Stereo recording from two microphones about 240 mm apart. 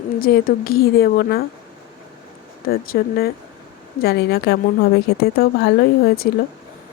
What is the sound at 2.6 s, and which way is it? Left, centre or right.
A woman's voice, left.